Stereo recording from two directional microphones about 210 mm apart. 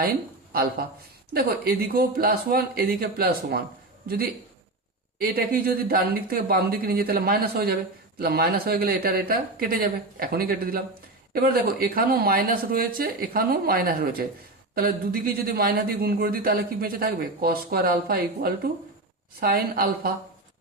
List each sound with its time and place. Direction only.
0.5 s a man's voice: 45° right (ahead or behind)